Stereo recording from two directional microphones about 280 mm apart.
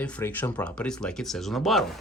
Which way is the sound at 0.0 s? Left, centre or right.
Centre.